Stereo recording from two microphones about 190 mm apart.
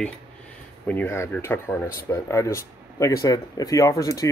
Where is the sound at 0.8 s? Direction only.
10° left (ahead or behind).